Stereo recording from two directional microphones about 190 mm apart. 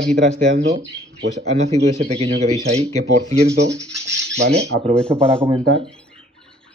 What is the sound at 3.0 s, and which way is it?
Speech, 60° right (ahead or behind).